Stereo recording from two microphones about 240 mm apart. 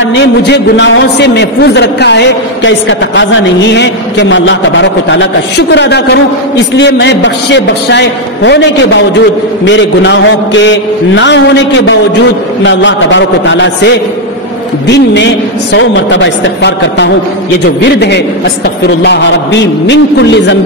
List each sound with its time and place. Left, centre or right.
0.1 s a man's voice: left